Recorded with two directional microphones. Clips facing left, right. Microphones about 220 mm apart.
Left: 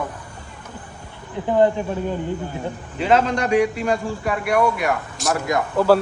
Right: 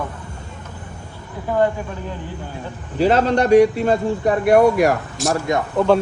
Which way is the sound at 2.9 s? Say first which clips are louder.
Right 3 dB; 35° right (ahead or behind).